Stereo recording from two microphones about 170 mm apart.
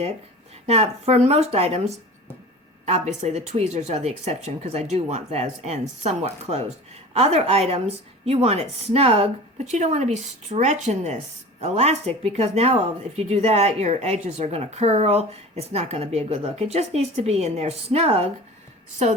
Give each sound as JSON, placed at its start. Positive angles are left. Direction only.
{"t": 0.7, "sound": "speech", "side_deg": -40}